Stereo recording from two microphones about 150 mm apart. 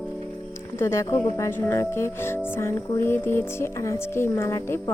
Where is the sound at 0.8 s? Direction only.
15° left (ahead or behind).